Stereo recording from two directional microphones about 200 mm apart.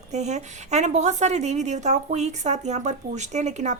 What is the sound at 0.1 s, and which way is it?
A woman's voice, 35° right (ahead or behind).